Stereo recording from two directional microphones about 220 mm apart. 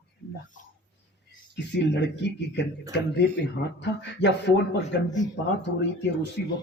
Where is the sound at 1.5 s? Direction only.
55° left (ahead or behind).